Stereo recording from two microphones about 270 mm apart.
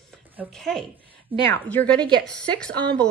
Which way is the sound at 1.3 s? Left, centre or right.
Centre.